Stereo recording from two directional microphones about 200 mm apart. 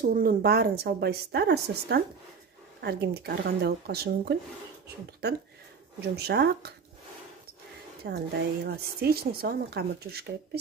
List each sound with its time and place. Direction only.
0.1 s a woman's voice: 45° right (ahead or behind)
8.0 s a woman's voice: 50° right (ahead or behind)